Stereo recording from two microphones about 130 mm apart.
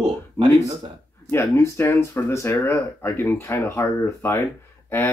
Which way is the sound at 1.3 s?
20° left (ahead or behind).